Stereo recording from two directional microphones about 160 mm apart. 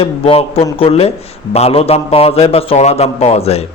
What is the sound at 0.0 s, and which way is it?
A man's voice, 35° left (ahead or behind).